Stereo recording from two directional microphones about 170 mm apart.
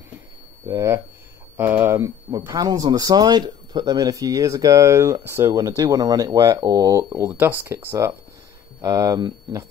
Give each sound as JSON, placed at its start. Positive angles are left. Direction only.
{"t": 0.7, "sound": "speech", "side_deg": -15}